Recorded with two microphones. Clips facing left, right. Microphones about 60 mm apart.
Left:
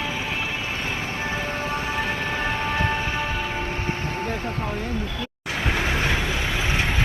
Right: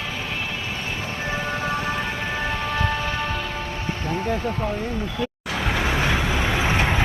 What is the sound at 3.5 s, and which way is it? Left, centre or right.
Vehicle, left.